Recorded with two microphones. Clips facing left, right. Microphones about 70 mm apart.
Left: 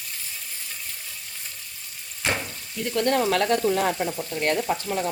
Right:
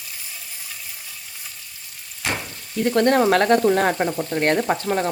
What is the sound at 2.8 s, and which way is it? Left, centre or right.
Speech, right.